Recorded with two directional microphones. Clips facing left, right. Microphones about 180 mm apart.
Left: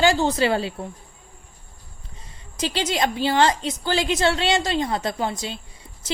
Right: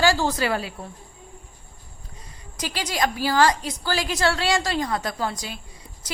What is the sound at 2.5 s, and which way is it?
A woman's voice, 25° left (ahead or behind).